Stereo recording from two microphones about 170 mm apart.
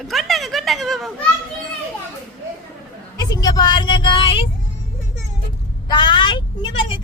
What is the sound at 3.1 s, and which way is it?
Speech, 25° left (ahead or behind).